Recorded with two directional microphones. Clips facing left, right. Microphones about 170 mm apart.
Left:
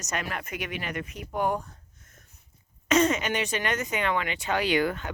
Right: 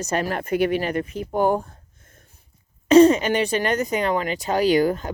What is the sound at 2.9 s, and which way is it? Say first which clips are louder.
Speech: right 10 dB; 35° right (ahead or behind).